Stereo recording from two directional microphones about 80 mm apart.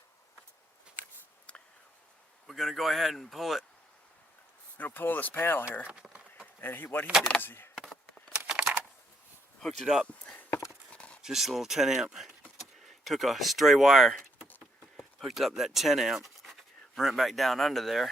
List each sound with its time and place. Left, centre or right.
2.5 s speech: centre
4.8 s speech: left
5.9 s speech: centre
6.6 s speech: left
7.8 s a sound: centre
8.4 s computer keyboard: centre
9.8 s speech: centre
10.2 s clip-clop: left
10.9 s a sound: centre
11.2 s speech: centre
14.4 s patter: left
15.2 s speech: centre